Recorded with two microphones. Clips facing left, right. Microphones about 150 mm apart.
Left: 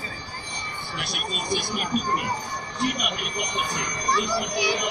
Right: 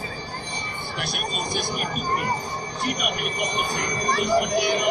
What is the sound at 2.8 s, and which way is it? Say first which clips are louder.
Speech: even; 50° right (ahead or behind).